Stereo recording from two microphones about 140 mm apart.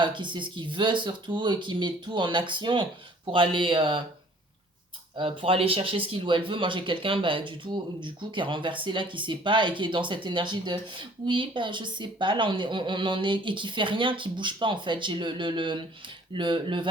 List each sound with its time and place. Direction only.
0.0 s speech: 35° right (ahead or behind)
5.1 s speech: 40° right (ahead or behind)